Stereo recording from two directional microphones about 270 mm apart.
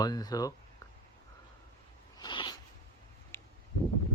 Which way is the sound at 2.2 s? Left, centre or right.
Centre.